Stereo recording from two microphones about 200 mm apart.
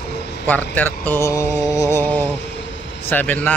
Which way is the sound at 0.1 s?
55° left (ahead or behind).